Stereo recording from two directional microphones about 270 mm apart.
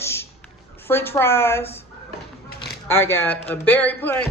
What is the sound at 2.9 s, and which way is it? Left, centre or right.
A woman's voice, centre.